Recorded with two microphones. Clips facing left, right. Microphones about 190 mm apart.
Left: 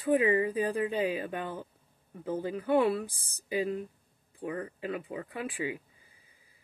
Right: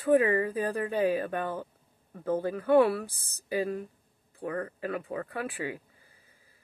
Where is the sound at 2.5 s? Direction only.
15° left (ahead or behind).